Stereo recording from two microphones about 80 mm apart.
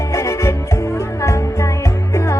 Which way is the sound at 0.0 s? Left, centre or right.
Left.